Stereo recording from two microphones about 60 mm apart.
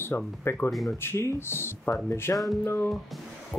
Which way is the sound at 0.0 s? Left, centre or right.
Left.